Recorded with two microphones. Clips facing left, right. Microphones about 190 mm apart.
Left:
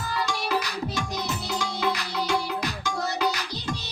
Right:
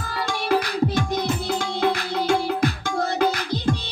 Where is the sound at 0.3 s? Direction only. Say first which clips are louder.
Right 10 dB; 55° right (ahead or behind).